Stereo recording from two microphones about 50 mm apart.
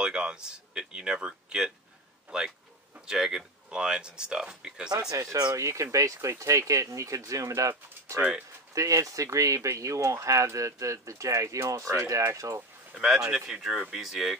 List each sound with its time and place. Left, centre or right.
0.0 s speech: centre
3.1 s speech: centre
5.1 s speech: right
12.9 s speech: centre